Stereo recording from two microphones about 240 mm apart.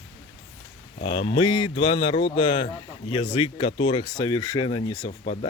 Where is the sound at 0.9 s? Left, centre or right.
Left.